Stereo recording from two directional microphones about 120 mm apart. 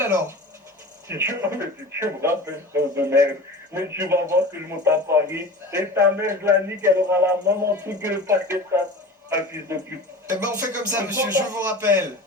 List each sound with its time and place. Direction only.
0.0 s a man's voice: 20° right (ahead or behind)